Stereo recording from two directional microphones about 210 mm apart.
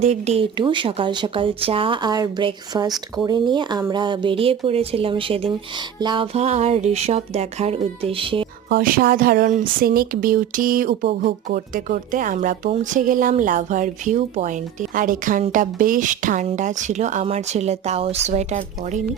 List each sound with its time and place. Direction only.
0.0 s speech: 30° right (ahead or behind)
8.7 s speech: 45° right (ahead or behind)